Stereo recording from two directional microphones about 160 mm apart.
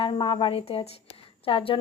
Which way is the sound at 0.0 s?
30° left (ahead or behind).